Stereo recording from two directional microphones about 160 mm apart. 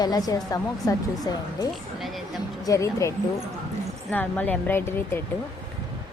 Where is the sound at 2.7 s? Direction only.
20° left (ahead or behind).